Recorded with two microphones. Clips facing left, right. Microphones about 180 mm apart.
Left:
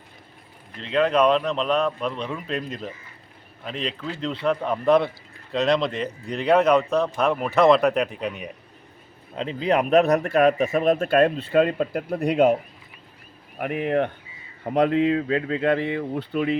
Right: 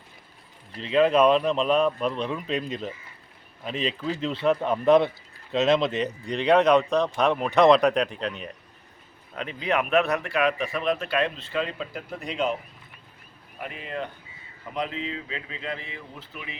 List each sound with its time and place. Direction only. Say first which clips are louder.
0.8 s speech: right 1 dB; 5° right (ahead or behind); by 8.4 s 10° left (ahead or behind)
9.3 s speech: left 5 dB; 30° left (ahead or behind); by 12.5 s 60° left (ahead or behind)
13.6 s speech: left 11 dB; 60° left (ahead or behind)